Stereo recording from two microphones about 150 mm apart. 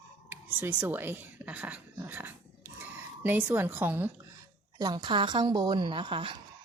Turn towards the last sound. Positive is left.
turn(degrees=-35)  # may be behind; listen again after turning